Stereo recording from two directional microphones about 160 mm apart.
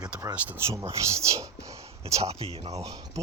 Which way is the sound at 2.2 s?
40° right (ahead or behind).